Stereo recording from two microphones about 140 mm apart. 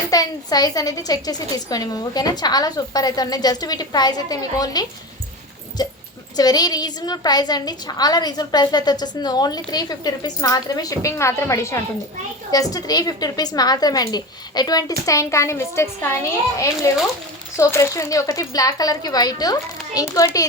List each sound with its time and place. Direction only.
0.1 s a woman's voice: 25° left (ahead or behind)